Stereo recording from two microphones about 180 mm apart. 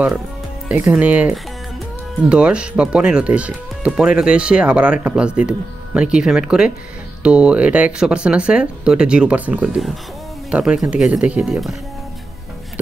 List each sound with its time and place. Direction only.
0.7 s speech: 10° right (ahead or behind)